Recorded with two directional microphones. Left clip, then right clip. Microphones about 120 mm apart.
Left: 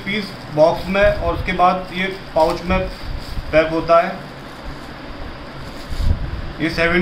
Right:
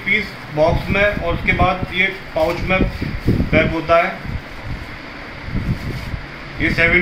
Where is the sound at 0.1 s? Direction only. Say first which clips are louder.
Right 5 dB; 15° left (ahead or behind).